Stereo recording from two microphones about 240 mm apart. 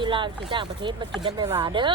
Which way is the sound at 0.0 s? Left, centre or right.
Centre.